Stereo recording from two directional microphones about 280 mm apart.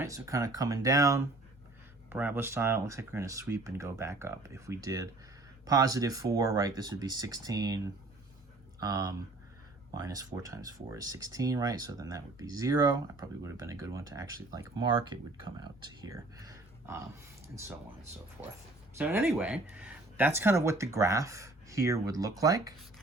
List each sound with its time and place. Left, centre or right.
0.0 s speech: centre
8.8 s speech: centre
18.9 s speech: centre